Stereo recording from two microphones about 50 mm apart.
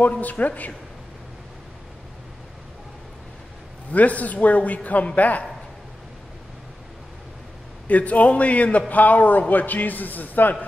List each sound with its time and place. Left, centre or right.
0.2 s a man's voice: left
3.9 s a man's voice: left
7.9 s a man's voice: left